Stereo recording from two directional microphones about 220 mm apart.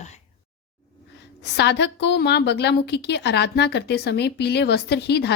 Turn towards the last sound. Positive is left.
turn(degrees=50)  # may be behind; listen again after turning